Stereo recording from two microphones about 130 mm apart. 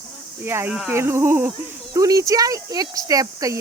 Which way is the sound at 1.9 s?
25° right (ahead or behind).